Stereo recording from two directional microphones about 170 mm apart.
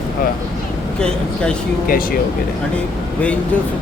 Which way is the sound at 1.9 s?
60° left (ahead or behind).